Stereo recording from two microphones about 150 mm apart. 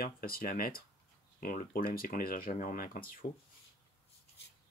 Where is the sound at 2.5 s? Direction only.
65° left (ahead or behind).